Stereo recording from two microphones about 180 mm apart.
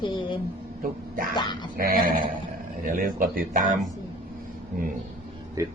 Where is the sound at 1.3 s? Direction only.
25° left (ahead or behind).